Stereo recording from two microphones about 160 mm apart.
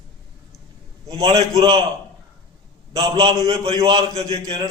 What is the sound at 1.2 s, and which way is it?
Speech, 40° right (ahead or behind).